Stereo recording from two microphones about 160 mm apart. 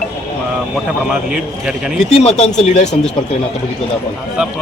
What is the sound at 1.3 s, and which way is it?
Speech, 5° right (ahead or behind).